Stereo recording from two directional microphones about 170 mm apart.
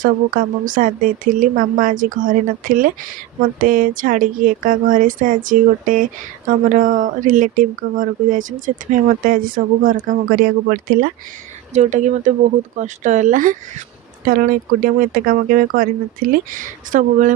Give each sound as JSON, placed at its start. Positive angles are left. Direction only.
{"t": 0.0, "sound": "speech", "side_deg": -55}
{"t": 11.7, "sound": "speech", "side_deg": -45}